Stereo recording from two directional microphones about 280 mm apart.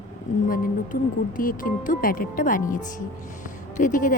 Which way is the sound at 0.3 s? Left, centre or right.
Left.